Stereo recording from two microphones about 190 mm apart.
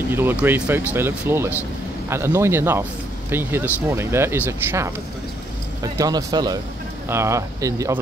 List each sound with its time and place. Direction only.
0.1 s speech: 10° right (ahead or behind)